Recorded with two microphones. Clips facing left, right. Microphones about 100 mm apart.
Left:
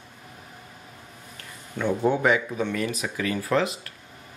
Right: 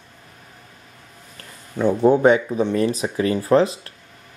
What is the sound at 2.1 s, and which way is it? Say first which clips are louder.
Speech: right 8 dB; 30° right (ahead or behind).